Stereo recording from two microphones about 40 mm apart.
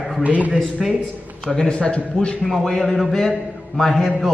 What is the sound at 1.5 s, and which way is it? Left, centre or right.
Speech, left.